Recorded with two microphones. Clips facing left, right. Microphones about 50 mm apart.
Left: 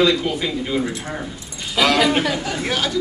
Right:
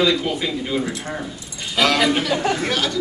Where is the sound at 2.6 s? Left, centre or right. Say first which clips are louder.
Even; centre.